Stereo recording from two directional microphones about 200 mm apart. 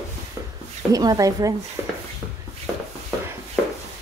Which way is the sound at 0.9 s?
20° right (ahead or behind).